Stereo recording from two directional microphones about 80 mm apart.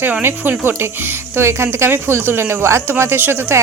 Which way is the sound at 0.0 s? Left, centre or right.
Right.